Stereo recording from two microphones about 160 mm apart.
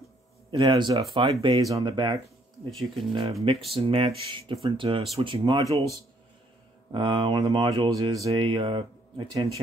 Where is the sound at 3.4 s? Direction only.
35° right (ahead or behind).